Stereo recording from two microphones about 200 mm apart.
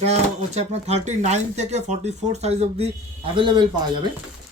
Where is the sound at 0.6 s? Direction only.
35° right (ahead or behind).